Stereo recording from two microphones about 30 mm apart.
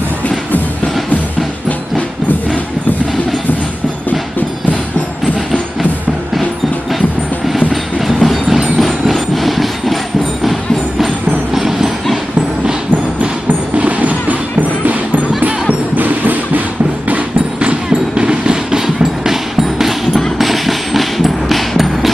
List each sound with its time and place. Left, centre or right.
7.7 s train: centre
9.1 s vehicle: centre
11.3 s train: centre
13.7 s music: right
16.0 s music: right
18.2 s train: right
18.9 s music: centre
20.4 s music: centre